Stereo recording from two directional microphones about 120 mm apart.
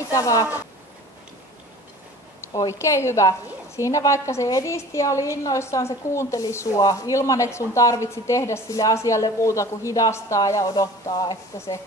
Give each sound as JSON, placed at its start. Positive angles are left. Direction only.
{"t": 0.1, "sound": "a woman's voice", "side_deg": 30}
{"t": 2.4, "sound": "a woman's voice", "side_deg": 25}